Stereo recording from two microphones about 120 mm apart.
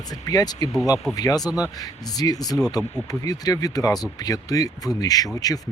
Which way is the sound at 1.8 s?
30° left (ahead or behind).